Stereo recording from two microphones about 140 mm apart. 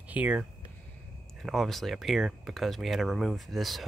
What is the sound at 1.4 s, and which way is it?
Speech, centre (ahead or behind).